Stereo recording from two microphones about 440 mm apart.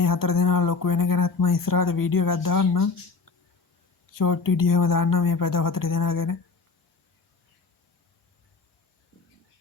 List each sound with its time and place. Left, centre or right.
0.0 s speech: left
4.1 s speech: left